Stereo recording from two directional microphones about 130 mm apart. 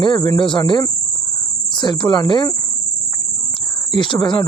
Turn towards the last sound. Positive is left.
turn(degrees=40)  # may be behind; listen again after turning